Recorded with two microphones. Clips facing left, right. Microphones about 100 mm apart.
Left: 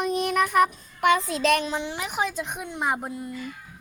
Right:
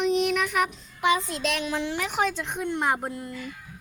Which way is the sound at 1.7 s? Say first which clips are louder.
Right 1 dB; 20° left (ahead or behind).